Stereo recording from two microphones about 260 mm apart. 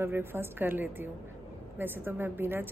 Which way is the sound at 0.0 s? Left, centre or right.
Centre.